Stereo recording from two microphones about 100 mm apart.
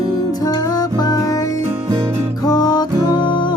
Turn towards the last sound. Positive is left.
turn(degrees=55)  # may be behind; listen again after turning